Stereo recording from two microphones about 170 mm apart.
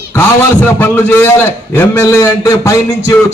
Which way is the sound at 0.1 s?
10° left (ahead or behind).